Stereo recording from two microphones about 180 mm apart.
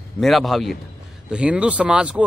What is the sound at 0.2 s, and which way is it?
A man's voice, centre (ahead or behind).